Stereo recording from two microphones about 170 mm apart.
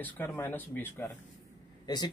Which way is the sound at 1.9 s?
25° left (ahead or behind).